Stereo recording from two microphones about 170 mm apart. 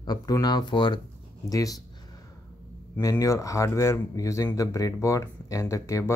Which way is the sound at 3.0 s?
20° left (ahead or behind).